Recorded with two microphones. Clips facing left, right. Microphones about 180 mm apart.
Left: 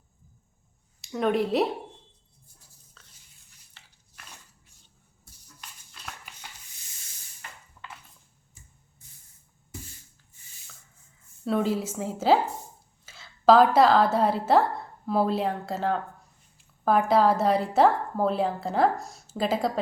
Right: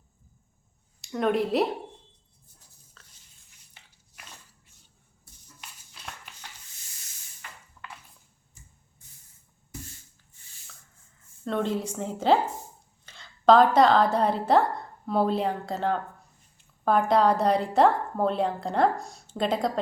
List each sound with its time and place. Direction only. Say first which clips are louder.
1.0 s a woman's voice: even; centre (ahead or behind)
3.0 s a sound: even; centre (ahead or behind)
11.4 s a woman's voice: left 2 dB; 5° left (ahead or behind)